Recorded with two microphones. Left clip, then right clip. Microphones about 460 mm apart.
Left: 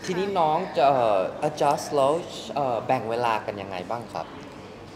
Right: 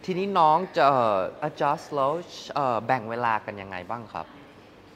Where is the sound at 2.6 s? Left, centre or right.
Right.